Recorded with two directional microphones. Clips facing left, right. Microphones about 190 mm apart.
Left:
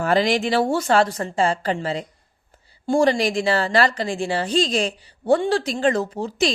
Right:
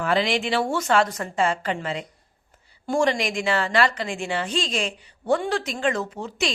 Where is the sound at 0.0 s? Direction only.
40° left (ahead or behind).